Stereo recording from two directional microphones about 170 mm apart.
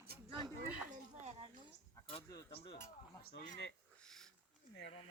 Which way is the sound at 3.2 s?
65° left (ahead or behind).